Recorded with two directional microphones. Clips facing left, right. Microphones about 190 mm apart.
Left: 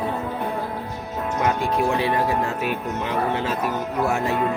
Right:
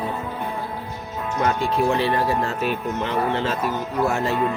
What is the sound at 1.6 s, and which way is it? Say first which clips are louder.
Music: right 1 dB; 15° left (ahead or behind).